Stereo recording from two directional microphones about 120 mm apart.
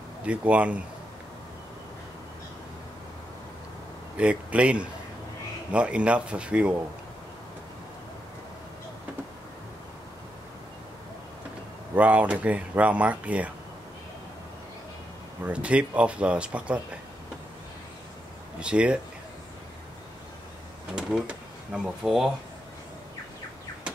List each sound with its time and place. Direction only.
0.2 s speech: 10° right (ahead or behind)
4.2 s speech: 10° right (ahead or behind)
11.9 s speech: 10° right (ahead or behind)
15.4 s speech: 10° right (ahead or behind)
18.6 s speech: 10° right (ahead or behind)
20.9 s speech: 5° right (ahead or behind)